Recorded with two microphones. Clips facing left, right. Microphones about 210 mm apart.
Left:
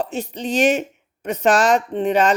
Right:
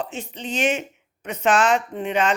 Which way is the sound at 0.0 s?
40° left (ahead or behind).